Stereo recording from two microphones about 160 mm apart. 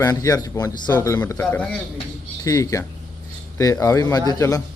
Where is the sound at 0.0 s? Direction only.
20° left (ahead or behind).